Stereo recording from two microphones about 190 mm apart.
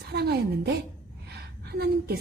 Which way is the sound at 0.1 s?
60° right (ahead or behind).